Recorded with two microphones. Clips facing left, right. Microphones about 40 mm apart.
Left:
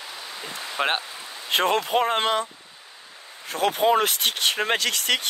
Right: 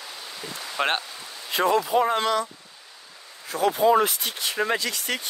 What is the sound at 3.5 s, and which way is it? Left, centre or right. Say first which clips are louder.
Speech: right 1 dB; left.